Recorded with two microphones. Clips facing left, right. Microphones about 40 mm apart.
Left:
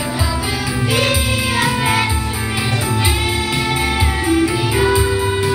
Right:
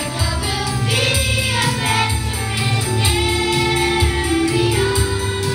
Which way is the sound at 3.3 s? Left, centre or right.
Centre.